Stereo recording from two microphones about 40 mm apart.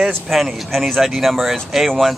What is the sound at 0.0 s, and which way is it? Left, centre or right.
Speech, centre.